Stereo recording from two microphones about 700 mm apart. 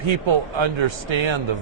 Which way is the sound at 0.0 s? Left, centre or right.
Right.